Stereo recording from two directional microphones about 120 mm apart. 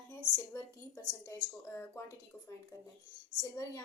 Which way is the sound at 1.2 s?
25° left (ahead or behind).